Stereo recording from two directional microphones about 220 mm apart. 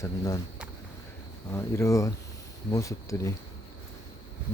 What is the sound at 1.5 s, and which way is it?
Speech, 15° left (ahead or behind).